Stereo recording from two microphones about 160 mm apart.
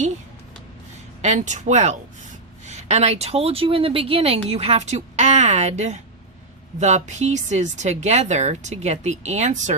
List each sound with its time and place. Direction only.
1.2 s a woman's voice: 45° right (ahead or behind)